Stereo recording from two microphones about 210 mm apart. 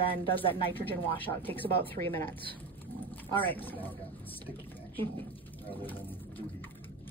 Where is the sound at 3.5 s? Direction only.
10° left (ahead or behind).